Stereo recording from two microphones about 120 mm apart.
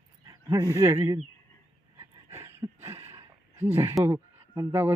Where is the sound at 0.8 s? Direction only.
20° right (ahead or behind).